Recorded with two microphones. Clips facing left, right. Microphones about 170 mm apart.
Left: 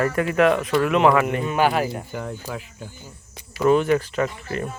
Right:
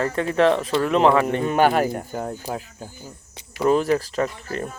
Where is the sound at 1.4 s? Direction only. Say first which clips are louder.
Right 2 dB; 45° right (ahead or behind).